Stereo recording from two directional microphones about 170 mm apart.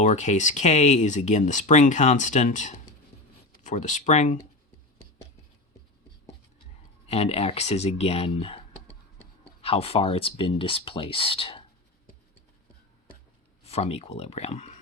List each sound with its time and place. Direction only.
0.0 s speech: 45° left (ahead or behind)
7.1 s speech: 35° left (ahead or behind)
13.7 s speech: 35° left (ahead or behind)